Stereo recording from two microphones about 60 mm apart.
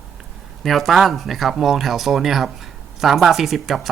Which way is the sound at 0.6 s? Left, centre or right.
Centre.